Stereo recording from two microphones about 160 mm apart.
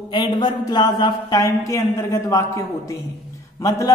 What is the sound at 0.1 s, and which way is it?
Speech, 25° left (ahead or behind).